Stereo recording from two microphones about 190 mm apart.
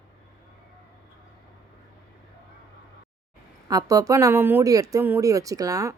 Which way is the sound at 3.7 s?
20° right (ahead or behind).